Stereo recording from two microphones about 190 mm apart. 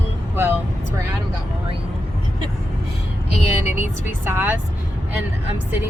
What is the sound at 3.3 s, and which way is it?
Vehicle, 35° left (ahead or behind).